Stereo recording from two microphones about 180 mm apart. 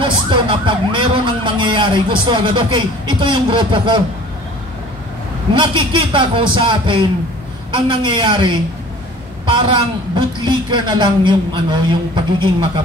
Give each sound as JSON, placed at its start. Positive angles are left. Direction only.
{"t": 0.0, "sound": "speech", "side_deg": -25}
{"t": 5.5, "sound": "a woman's voice", "side_deg": -25}
{"t": 10.1, "sound": "a woman's voice", "side_deg": -25}